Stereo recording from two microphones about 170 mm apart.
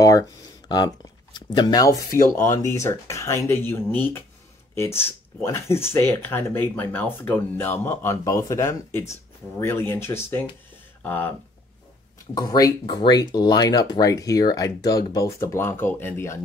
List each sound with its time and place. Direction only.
0.7 s speech: 25° left (ahead or behind)
12.4 s speech: 20° left (ahead or behind)